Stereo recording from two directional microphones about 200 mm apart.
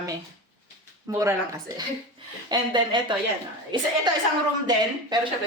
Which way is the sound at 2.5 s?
25° right (ahead or behind).